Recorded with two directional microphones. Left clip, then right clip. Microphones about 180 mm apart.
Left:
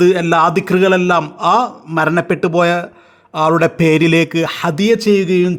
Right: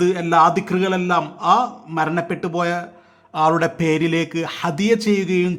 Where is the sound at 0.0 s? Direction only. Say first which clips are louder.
Left 4 dB; 30° left (ahead or behind).